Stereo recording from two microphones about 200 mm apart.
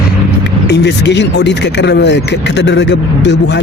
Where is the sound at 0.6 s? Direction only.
60° left (ahead or behind).